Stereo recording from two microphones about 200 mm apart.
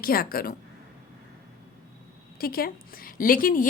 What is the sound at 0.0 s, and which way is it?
Speech, 45° left (ahead or behind).